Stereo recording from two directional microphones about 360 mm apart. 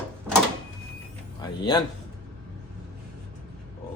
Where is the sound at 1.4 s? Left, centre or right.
Centre.